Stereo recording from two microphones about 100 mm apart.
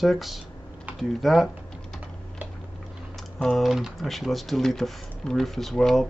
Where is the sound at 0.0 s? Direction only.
Centre (ahead or behind).